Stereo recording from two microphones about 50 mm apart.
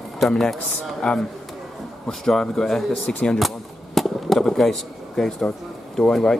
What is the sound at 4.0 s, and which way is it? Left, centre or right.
Speech, centre.